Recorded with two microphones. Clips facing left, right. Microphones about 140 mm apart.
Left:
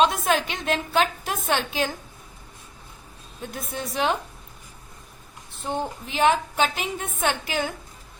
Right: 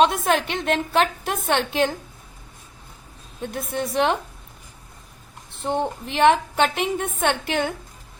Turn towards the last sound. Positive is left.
turn(degrees=-65)  # may be behind; listen again after turning